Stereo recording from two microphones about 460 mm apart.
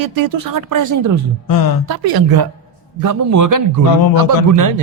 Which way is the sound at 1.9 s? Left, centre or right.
Right.